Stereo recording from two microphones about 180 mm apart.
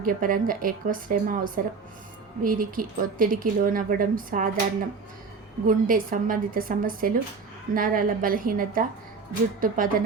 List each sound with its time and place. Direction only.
0.0 s speech: 50° right (ahead or behind)
5.6 s speech: 50° right (ahead or behind)